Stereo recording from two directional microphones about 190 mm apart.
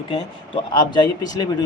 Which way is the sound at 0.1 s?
25° left (ahead or behind).